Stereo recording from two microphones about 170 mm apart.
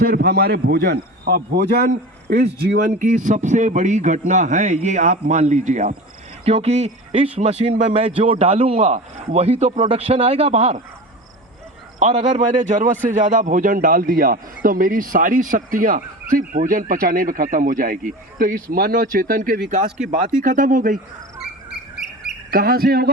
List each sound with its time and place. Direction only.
0.0 s a man's voice: 60° right (ahead or behind); by 10.8 s 35° right (ahead or behind)
11.9 s a man's voice: 45° right (ahead or behind)
22.5 s speech: 60° right (ahead or behind)